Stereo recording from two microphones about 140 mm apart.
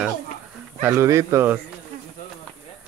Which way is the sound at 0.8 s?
20° right (ahead or behind).